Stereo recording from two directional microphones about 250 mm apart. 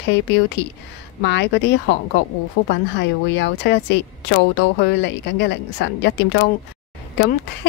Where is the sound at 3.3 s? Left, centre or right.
Left.